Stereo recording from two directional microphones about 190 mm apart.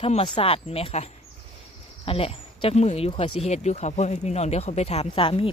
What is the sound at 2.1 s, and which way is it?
Speech, 30° left (ahead or behind).